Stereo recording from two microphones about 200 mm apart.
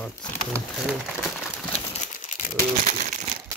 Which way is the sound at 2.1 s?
40° left (ahead or behind).